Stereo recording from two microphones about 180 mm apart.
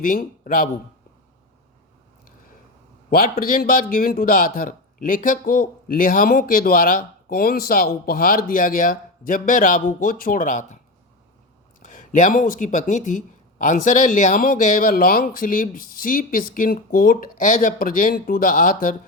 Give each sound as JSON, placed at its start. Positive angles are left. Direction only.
{"t": 0.0, "sound": "a man's voice", "side_deg": 50}
{"t": 3.1, "sound": "a man's voice", "side_deg": 55}
{"t": 11.9, "sound": "a man's voice", "side_deg": 45}